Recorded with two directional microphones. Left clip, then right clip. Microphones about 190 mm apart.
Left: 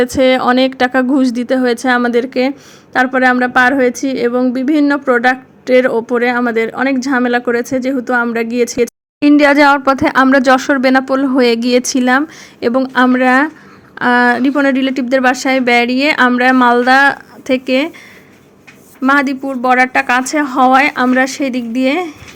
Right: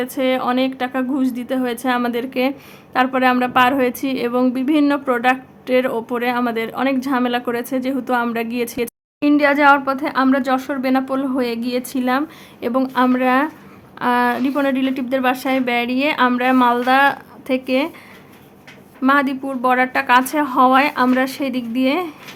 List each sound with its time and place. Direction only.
0.0 s a woman's voice: 30° left (ahead or behind)
19.0 s a woman's voice: 20° left (ahead or behind)